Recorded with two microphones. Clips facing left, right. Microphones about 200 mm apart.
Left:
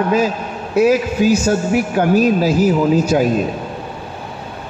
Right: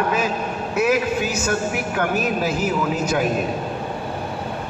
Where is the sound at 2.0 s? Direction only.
35° left (ahead or behind).